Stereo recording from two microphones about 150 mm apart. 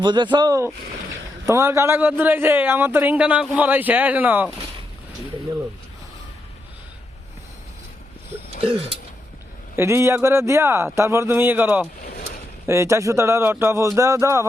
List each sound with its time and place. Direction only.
0.0 s a man's voice: 30° right (ahead or behind); by 4.4 s 10° right (ahead or behind)
8.6 s speech: 40° right (ahead or behind)
9.7 s a man's voice: 15° right (ahead or behind)